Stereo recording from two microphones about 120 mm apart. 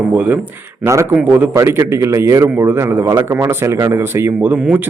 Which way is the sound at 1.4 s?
20° right (ahead or behind).